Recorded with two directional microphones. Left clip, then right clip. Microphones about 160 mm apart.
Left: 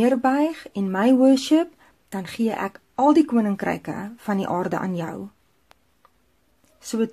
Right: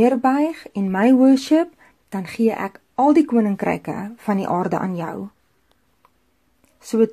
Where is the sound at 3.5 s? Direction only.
25° right (ahead or behind).